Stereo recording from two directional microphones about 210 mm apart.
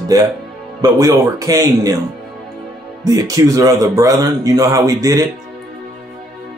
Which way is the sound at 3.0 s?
15° right (ahead or behind).